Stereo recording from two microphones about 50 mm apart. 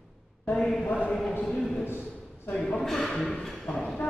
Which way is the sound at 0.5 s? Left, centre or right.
Centre.